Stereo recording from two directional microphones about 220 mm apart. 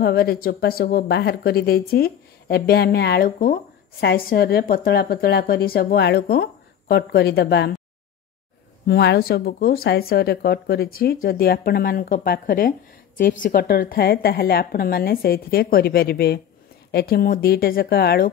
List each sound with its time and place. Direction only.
0.0 s a woman's voice: 45° left (ahead or behind)
8.8 s a woman's voice: 50° left (ahead or behind)